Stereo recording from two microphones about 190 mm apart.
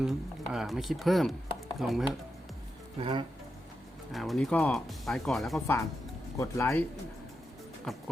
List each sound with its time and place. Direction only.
0.0 s speech: 5° right (ahead or behind)
3.0 s speech: 25° right (ahead or behind)
4.1 s speech: centre (ahead or behind)
6.3 s speech: 15° left (ahead or behind)
7.9 s speech: centre (ahead or behind)